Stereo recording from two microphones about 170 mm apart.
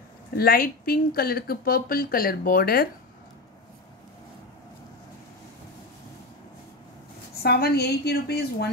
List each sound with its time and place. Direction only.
0.4 s speech: 60° left (ahead or behind)
7.3 s a woman's voice: 65° left (ahead or behind)